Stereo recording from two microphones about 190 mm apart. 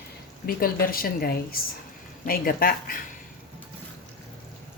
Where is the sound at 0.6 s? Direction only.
50° left (ahead or behind).